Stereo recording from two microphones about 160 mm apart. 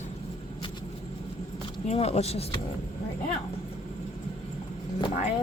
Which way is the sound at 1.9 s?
40° left (ahead or behind).